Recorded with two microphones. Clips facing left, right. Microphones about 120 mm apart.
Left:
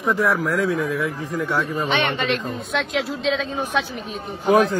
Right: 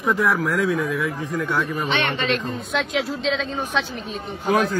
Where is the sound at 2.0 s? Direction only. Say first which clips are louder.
Even; 15° left (ahead or behind).